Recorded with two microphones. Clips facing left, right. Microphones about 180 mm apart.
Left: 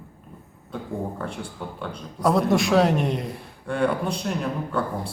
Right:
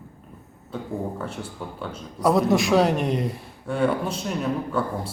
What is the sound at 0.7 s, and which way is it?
A man's voice, 5° right (ahead or behind).